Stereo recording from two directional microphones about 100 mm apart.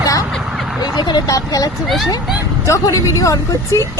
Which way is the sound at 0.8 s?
45° left (ahead or behind).